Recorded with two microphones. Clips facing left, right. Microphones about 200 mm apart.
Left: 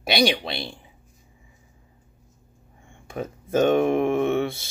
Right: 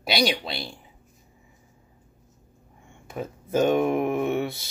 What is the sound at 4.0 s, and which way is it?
Mantra, 25° left (ahead or behind).